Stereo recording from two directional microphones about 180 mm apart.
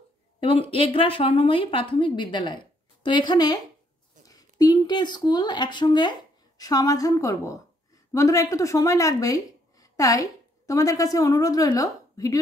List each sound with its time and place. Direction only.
0.4 s a woman's voice: 30° left (ahead or behind)